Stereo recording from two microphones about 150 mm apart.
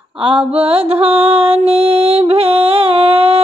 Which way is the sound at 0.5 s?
40° right (ahead or behind).